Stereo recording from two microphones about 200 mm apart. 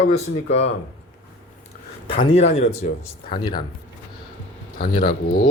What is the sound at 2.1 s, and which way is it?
Speech, 25° left (ahead or behind).